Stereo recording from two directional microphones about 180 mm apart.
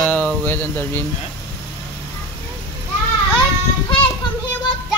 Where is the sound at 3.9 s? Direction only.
30° left (ahead or behind).